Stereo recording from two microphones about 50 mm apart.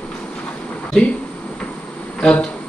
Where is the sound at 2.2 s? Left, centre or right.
Centre.